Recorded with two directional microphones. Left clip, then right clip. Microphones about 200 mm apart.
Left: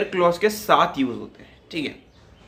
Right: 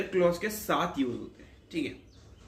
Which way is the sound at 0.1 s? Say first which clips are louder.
Left 6 dB; 15° left (ahead or behind).